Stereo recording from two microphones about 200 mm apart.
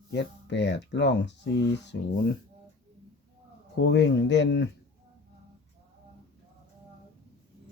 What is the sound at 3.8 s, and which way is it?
Speech, 60° left (ahead or behind).